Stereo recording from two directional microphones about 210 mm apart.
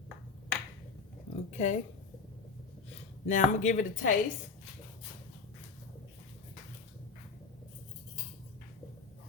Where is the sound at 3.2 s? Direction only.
35° left (ahead or behind).